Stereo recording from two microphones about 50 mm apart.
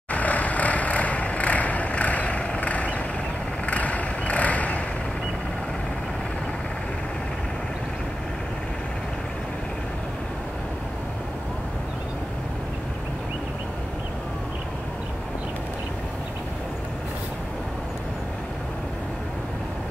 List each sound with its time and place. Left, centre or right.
0.1 s vehicle: left